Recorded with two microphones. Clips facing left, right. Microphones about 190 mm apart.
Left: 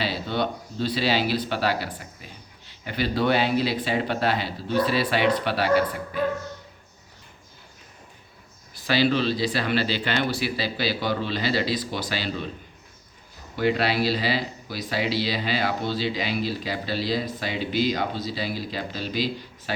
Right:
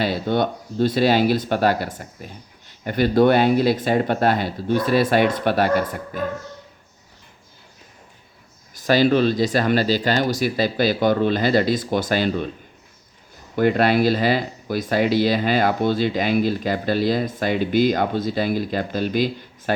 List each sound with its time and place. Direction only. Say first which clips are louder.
0.0 s speech: right 6 dB; 50° right (ahead or behind)
8.7 s speech: right 6 dB; 45° right (ahead or behind)
13.6 s speech: right 6 dB; 50° right (ahead or behind)